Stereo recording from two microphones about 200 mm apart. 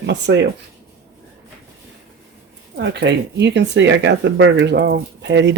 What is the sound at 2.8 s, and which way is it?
Speech, 60° right (ahead or behind).